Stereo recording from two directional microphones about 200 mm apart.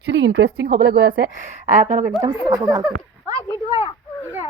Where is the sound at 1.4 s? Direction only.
40° right (ahead or behind).